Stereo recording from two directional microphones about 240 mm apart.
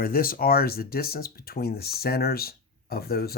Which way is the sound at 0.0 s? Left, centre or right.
Left.